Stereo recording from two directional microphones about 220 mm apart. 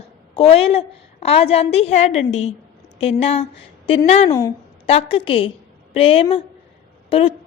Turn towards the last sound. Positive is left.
turn(degrees=25)  # may be behind; listen again after turning